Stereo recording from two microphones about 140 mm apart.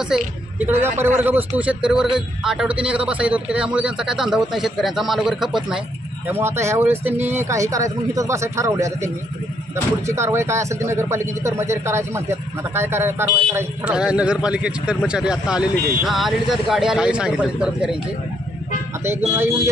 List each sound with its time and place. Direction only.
0.1 s speech: 5° right (ahead or behind)
0.6 s a man's voice: 15° right (ahead or behind)
6.2 s speech: 15° right (ahead or behind)
10.1 s speech: 20° right (ahead or behind)